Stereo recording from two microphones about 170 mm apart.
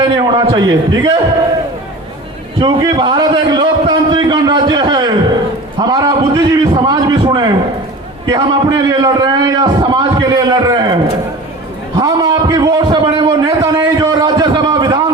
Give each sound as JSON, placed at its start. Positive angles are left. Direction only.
{"t": 0.0, "sound": "a man's voice", "side_deg": -20}
{"t": 2.6, "sound": "a man's voice", "side_deg": -25}
{"t": 11.9, "sound": "a sound", "side_deg": -20}